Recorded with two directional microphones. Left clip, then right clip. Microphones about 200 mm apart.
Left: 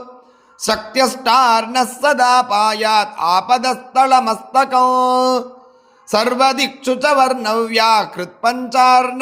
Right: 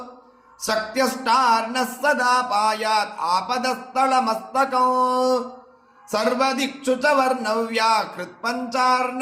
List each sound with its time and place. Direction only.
0.6 s music: 40° left (ahead or behind)